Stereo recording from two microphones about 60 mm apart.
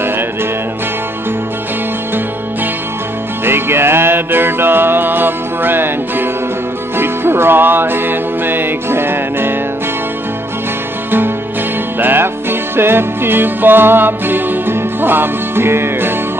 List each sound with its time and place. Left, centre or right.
3.4 s music: right
11.1 s music: right